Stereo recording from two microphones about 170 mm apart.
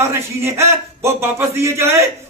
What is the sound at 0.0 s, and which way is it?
A man's voice, 15° right (ahead or behind).